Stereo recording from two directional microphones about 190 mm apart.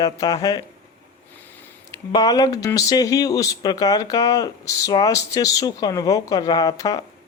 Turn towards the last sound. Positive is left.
turn(degrees=20)  # may be behind; listen again after turning